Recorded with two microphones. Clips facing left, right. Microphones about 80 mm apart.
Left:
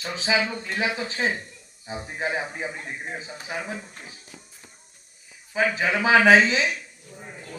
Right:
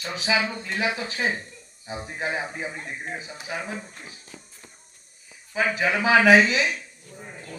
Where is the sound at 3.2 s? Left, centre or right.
Left.